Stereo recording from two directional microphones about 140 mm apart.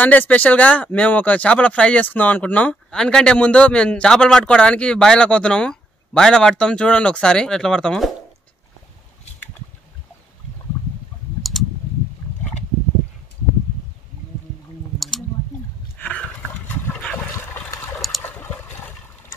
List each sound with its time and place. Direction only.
0.0 s speech: 10° left (ahead or behind)
11.5 s a sound: centre (ahead or behind)
15.0 s a sound: centre (ahead or behind)
16.0 s dog: 10° left (ahead or behind)
17.5 s water: 20° left (ahead or behind)
17.9 s water: centre (ahead or behind)
18.2 s water: 15° left (ahead or behind)